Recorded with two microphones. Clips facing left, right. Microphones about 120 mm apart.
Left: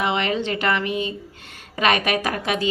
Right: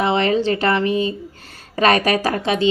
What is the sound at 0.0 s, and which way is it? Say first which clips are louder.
Speech: right 5 dB; 35° right (ahead or behind).